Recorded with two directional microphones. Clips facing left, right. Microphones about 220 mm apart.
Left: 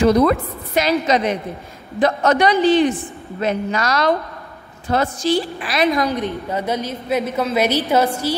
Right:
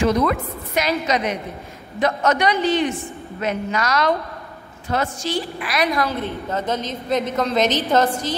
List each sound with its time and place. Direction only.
0.0 s a man's voice: 35° left (ahead or behind)
6.0 s a woman's voice: 15° left (ahead or behind)